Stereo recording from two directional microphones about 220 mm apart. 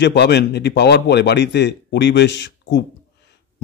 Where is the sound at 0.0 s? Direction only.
50° left (ahead or behind).